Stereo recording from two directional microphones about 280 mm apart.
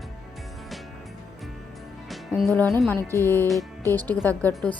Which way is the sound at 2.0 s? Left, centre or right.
Centre.